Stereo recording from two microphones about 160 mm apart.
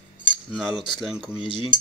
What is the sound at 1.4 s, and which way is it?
Speech, 30° left (ahead or behind).